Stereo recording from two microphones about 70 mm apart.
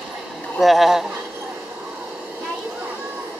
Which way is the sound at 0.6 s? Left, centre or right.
Centre.